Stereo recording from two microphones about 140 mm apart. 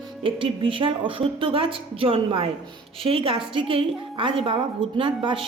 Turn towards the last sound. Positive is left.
turn(degrees=-35)  # may be behind; listen again after turning